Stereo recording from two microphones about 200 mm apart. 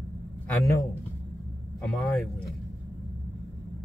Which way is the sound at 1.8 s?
Centre (ahead or behind).